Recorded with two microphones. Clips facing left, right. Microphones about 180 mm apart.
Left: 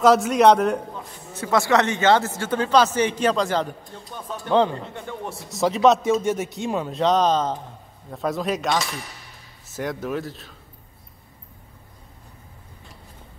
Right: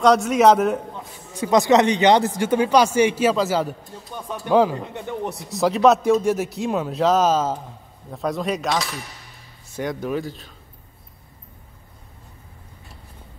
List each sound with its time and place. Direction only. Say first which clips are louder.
0.0 s a man's voice: even; centre (ahead or behind)
1.3 s a man's voice: right 4 dB; 15° right (ahead or behind)
5.5 s a man's voice: right 1 dB; centre (ahead or behind)